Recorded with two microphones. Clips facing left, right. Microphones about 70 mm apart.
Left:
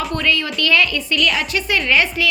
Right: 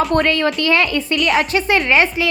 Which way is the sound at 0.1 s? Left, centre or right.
Right.